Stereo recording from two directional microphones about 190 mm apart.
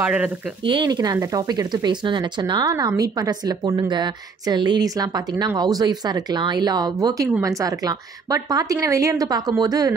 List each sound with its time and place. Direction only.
0.0 s a woman's voice: 5° right (ahead or behind)
0.7 s a woman's voice: 25° right (ahead or behind)